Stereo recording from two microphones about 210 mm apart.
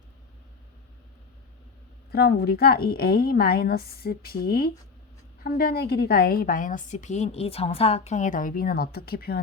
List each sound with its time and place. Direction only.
2.1 s a woman's voice: 50° left (ahead or behind)